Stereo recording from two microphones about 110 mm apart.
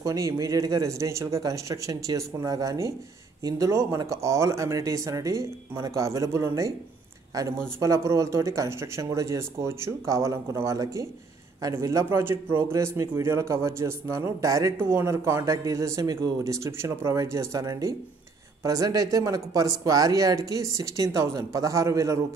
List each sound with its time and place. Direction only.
0.0 s a man's voice: 30° right (ahead or behind)